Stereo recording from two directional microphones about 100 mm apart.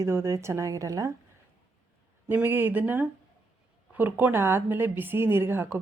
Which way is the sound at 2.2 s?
20° right (ahead or behind).